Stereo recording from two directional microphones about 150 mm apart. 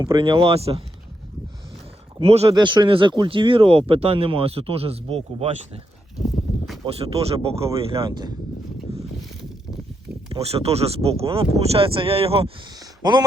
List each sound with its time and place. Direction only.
0.0 s speech: 30° right (ahead or behind)
2.2 s speech: 40° right (ahead or behind)
2.6 s speech: 30° right (ahead or behind)
6.8 s speech: 40° right (ahead or behind)
8.0 s speech: 30° right (ahead or behind)
8.9 s pulleys: 40° right (ahead or behind)
10.2 s speech: 40° right (ahead or behind)
12.8 s a sound: 25° right (ahead or behind)